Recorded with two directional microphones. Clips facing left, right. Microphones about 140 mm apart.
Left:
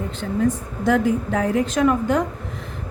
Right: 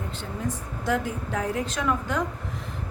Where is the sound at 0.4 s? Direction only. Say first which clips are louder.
Left 8 dB; 70° left (ahead or behind).